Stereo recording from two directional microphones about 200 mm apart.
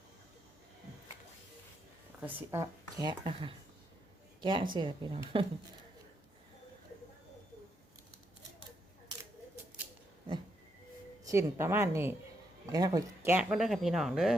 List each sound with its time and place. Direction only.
2.2 s speech: 15° right (ahead or behind)
4.4 s a sound: 25° right (ahead or behind)
4.7 s speech: 25° right (ahead or behind)
11.3 s a woman's voice: 15° right (ahead or behind)